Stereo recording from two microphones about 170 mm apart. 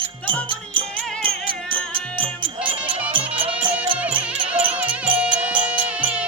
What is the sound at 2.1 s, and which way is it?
Music, 30° right (ahead or behind).